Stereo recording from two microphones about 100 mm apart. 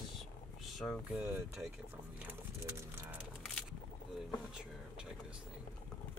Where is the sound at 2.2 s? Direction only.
20° right (ahead or behind).